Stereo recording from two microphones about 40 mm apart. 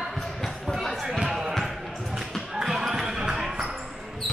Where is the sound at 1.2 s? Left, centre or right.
Centre.